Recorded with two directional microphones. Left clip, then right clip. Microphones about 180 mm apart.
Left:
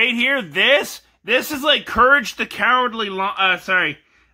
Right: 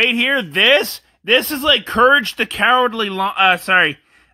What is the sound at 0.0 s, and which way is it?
Speech, 30° right (ahead or behind).